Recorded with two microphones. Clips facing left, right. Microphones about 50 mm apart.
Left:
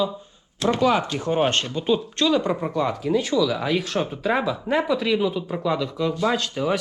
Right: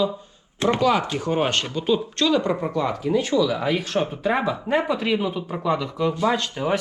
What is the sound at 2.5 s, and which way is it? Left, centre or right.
Speech, centre.